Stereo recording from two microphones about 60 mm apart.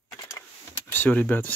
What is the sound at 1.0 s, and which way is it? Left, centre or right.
Speech, left.